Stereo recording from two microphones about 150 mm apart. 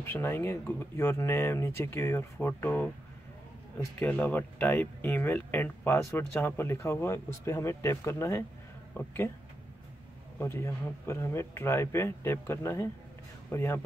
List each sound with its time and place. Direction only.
0.0 s speech: 15° left (ahead or behind)
4.0 s speech: 10° left (ahead or behind)
10.4 s speech: 15° left (ahead or behind)